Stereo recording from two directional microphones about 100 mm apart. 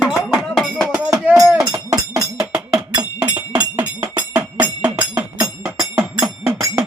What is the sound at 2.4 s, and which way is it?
Cowbell, 5° right (ahead or behind).